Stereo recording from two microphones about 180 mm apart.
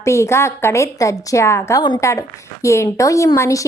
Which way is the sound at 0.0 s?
15° left (ahead or behind).